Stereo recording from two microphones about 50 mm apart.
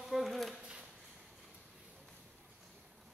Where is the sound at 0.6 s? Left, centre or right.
Centre.